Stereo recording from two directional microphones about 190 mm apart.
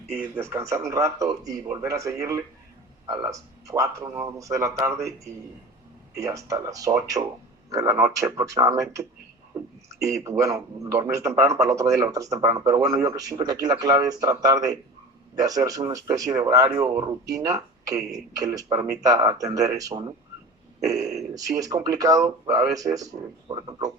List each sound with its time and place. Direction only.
0.2 s a man's voice: 15° right (ahead or behind)